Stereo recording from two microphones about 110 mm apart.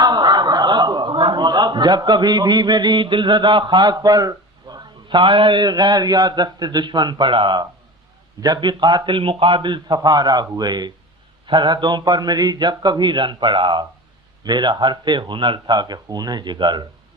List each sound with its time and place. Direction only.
0.0 s chuckle: 40° right (ahead or behind)
5.0 s a man's voice: 45° right (ahead or behind)